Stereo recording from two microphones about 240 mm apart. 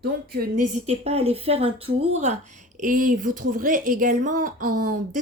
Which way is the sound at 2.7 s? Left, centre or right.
Right.